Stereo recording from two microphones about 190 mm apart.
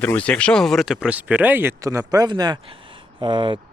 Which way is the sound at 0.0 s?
5° left (ahead or behind).